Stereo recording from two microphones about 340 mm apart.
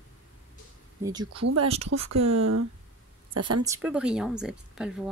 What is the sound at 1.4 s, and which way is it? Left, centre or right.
Speech, right.